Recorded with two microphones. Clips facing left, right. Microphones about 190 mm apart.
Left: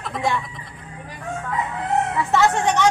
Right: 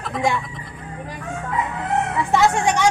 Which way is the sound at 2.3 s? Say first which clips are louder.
Right 2 dB; 15° right (ahead or behind).